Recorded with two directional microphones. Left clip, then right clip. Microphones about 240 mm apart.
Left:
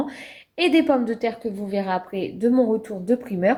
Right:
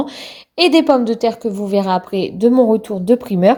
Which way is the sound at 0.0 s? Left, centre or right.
Right.